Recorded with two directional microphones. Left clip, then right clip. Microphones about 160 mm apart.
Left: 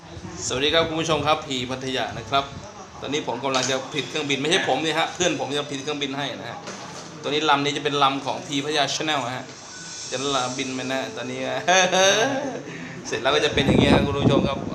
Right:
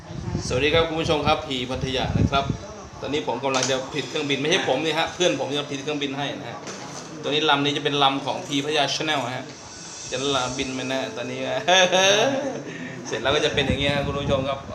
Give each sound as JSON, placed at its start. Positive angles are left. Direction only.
{"t": 0.4, "sound": "a man's voice", "side_deg": 20}
{"t": 13.1, "sound": "a man's voice", "side_deg": 35}